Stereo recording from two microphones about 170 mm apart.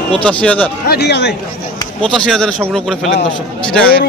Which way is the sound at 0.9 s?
75° left (ahead or behind).